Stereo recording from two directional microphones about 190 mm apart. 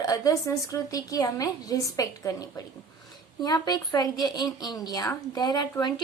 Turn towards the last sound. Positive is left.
turn(degrees=20)  # may be behind; listen again after turning